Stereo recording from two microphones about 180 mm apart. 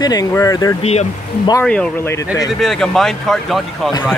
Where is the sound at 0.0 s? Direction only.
20° left (ahead or behind); by 3.9 s centre (ahead or behind).